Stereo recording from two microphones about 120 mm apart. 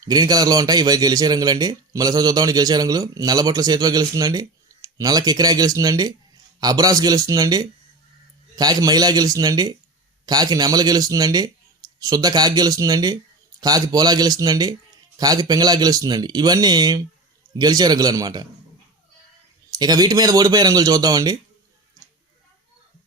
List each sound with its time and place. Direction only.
0.0 s speech: 35° right (ahead or behind)
19.7 s speech: 35° right (ahead or behind)